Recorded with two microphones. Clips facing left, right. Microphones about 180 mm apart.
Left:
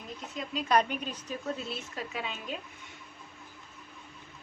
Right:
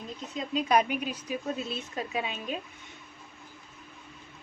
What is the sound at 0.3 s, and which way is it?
A woman's voice, 15° right (ahead or behind).